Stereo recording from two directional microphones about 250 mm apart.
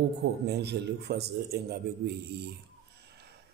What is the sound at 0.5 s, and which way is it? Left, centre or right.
Speech, right.